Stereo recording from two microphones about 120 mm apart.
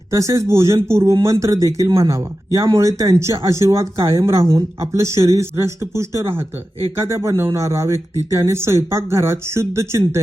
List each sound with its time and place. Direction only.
0.1 s speech: 25° right (ahead or behind)